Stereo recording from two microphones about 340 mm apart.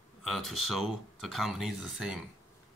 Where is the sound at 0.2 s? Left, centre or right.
Centre.